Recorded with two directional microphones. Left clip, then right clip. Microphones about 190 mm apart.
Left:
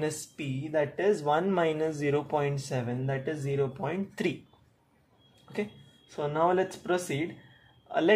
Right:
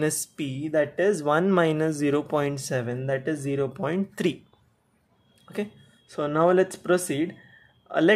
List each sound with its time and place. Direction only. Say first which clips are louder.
0.0 s speech: right 6 dB; 40° right (ahead or behind)
5.5 s speech: right 3 dB; 30° right (ahead or behind)
6.1 s speech: right 5 dB; 45° right (ahead or behind)